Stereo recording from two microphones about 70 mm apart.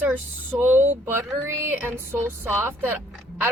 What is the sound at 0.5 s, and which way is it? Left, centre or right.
Speech, centre.